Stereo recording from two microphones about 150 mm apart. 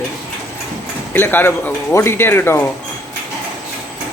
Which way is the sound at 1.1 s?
15° left (ahead or behind).